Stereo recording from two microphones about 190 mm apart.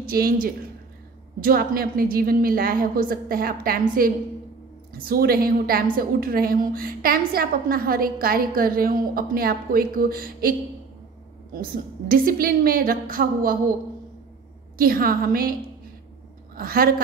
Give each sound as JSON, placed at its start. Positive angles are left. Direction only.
{"t": 0.0, "sound": "a woman's voice", "side_deg": -50}
{"t": 12.1, "sound": "a woman's voice", "side_deg": -50}
{"t": 14.8, "sound": "a woman's voice", "side_deg": -50}
{"t": 16.5, "sound": "a woman's voice", "side_deg": -50}